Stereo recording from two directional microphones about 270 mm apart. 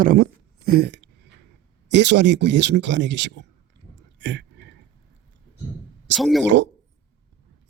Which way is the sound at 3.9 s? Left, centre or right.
Right.